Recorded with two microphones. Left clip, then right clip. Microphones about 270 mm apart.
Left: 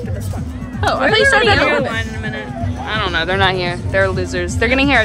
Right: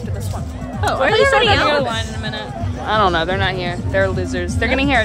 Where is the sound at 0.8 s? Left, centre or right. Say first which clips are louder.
Left 2 dB; left.